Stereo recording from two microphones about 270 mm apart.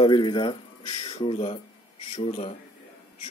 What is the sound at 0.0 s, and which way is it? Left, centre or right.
Speech, centre.